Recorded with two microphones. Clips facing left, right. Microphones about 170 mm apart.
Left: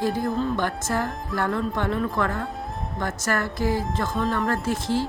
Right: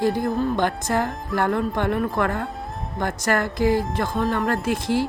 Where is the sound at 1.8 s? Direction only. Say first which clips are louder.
Right 3 dB; 60° right (ahead or behind).